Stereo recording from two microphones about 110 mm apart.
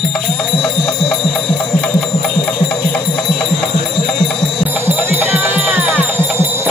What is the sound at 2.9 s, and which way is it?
Music, 5° left (ahead or behind).